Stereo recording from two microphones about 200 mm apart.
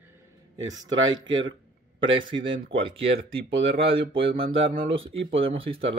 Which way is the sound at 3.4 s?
65° right (ahead or behind).